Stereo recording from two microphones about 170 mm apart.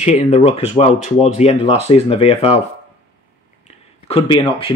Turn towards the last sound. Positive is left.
turn(degrees=30)  # may be behind; listen again after turning